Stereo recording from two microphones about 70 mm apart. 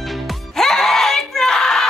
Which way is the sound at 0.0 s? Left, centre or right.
Centre.